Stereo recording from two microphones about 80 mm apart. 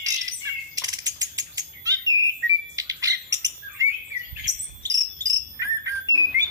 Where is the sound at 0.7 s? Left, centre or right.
Right.